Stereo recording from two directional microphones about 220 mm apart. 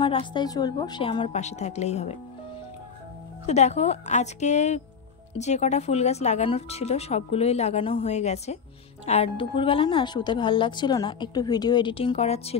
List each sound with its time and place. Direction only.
0.0 s a woman's voice: 20° left (ahead or behind)
3.4 s a woman's voice: 30° left (ahead or behind)